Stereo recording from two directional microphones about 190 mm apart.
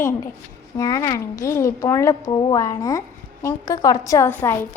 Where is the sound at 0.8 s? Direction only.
20° left (ahead or behind).